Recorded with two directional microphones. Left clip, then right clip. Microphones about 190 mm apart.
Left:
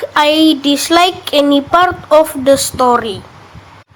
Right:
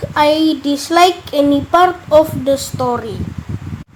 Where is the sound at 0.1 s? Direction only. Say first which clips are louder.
Left 2 dB; 15° left (ahead or behind).